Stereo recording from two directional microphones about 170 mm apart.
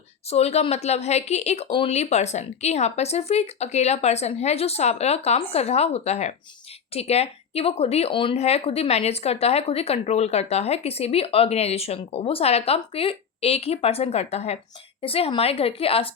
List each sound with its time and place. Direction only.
0.3 s a woman's voice: 40° left (ahead or behind)